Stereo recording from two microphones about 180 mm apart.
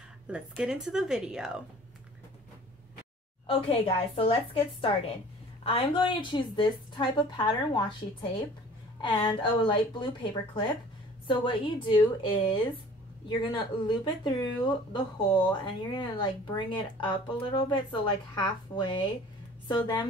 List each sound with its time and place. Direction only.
0.3 s speech: 5° right (ahead or behind)
3.4 s a woman's voice: 30° left (ahead or behind)
5.6 s speech: 30° left (ahead or behind)